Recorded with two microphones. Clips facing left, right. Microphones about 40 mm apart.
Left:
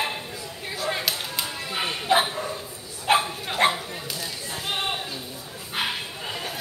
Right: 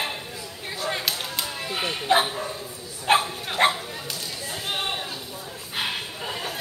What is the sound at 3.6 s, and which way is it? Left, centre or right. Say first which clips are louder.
Dog: right 1 dB; centre.